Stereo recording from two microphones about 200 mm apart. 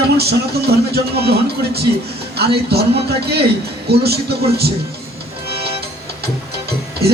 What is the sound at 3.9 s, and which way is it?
Speech, 50° right (ahead or behind).